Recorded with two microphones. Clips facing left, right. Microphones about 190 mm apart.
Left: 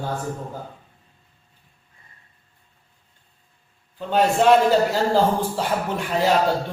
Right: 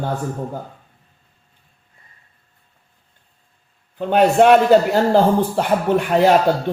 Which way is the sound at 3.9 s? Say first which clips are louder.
Right 6 dB; 65° right (ahead or behind).